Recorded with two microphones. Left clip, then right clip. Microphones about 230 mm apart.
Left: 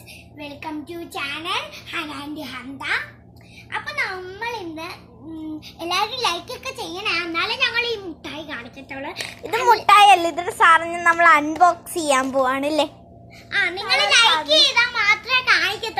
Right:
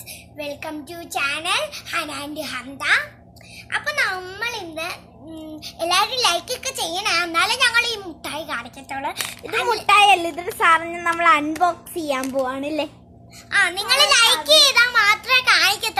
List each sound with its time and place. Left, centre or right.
0.3 s a child's voice: centre
9.8 s a child's voice: centre
13.5 s a child's voice: right